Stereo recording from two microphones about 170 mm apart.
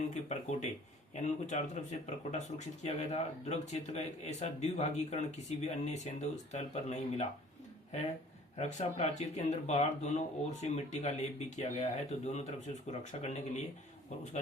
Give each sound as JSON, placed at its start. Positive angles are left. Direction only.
{"t": 0.1, "sound": "speech", "side_deg": 45}
{"t": 8.5, "sound": "speech", "side_deg": 40}